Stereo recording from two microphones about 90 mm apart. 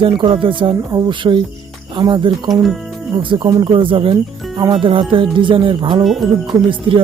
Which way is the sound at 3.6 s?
70° right (ahead or behind).